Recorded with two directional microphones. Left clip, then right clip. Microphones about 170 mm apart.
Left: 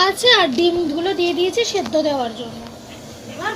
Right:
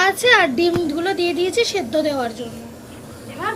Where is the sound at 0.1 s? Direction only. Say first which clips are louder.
Even; 15° left (ahead or behind).